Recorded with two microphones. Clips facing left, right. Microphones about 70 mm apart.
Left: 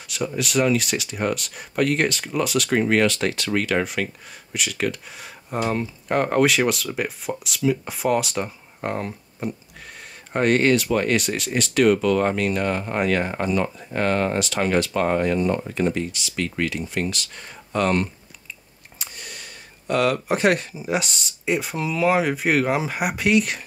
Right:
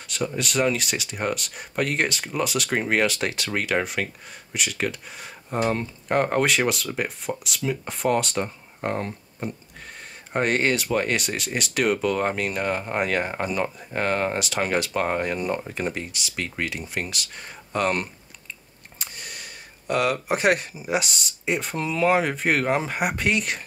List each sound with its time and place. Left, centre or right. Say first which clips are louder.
0.1 s speech: left 3 dB; centre